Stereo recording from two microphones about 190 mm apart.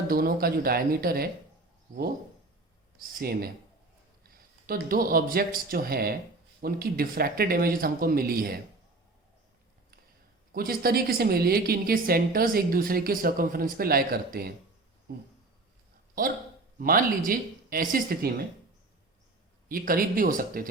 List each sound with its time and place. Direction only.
0.1 s a woman's voice: 50° right (ahead or behind)
3.0 s a woman's voice: 50° right (ahead or behind)
10.5 s a woman's voice: 50° right (ahead or behind)
16.7 s a woman's voice: 50° right (ahead or behind)
19.6 s a woman's voice: 50° right (ahead or behind)